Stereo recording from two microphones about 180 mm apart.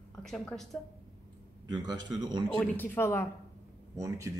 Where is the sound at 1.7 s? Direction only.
25° right (ahead or behind).